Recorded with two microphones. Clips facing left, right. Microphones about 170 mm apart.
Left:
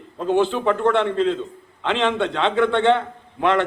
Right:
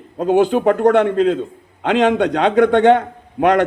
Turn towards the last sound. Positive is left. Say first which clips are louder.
# right 5 dB
turn(degrees=-45)  # may be behind; listen again after turning